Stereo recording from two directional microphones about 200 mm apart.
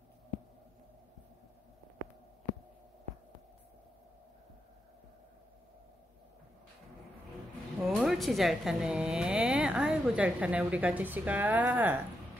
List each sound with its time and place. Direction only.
7.9 s a woman's voice: centre (ahead or behind)